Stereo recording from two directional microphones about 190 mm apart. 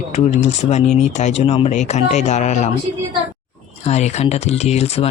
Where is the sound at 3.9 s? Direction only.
35° left (ahead or behind).